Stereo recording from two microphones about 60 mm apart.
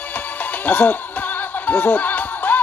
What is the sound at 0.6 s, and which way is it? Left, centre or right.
Music, left.